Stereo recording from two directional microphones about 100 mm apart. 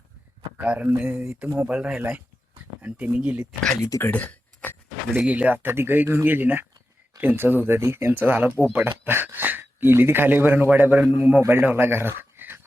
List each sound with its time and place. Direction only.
0.5 s speech: 15° right (ahead or behind)
3.8 s speech: 35° left (ahead or behind)
4.0 s a sound: 15° left (ahead or behind)
5.2 s speech: 15° right (ahead or behind)